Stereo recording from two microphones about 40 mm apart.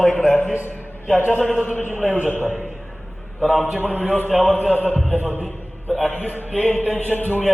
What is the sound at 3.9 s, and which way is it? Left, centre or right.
Speech, right.